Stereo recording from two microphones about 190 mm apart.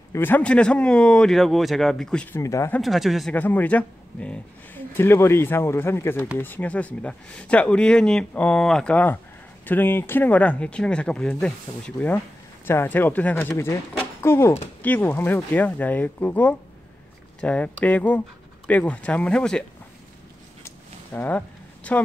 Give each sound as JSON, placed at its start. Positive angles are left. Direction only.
{"t": 0.1, "sound": "speech", "side_deg": 10}
{"t": 2.4, "sound": "speech", "side_deg": 15}
{"t": 2.8, "sound": "speech", "side_deg": 0}
{"t": 20.6, "sound": "vehicle", "side_deg": 10}